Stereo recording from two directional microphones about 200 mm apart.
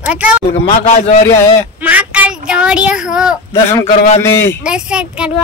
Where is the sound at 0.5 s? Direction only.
30° left (ahead or behind).